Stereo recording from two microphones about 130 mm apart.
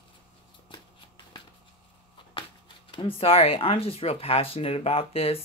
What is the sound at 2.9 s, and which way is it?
Speech, 45° left (ahead or behind).